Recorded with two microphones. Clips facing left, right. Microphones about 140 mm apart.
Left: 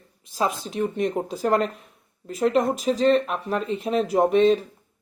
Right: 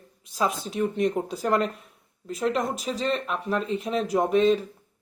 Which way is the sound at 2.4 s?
40° left (ahead or behind).